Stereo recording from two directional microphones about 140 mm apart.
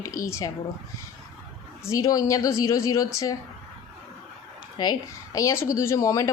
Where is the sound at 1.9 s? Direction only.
25° left (ahead or behind).